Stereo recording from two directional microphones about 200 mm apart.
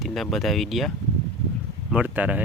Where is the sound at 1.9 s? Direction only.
5° right (ahead or behind).